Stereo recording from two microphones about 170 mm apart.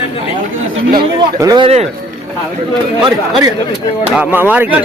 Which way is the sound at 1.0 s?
25° right (ahead or behind).